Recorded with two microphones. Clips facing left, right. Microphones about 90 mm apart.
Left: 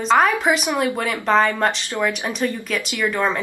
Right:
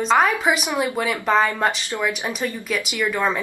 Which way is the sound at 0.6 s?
15° right (ahead or behind).